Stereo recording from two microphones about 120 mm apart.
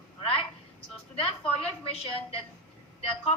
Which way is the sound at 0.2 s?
50° left (ahead or behind).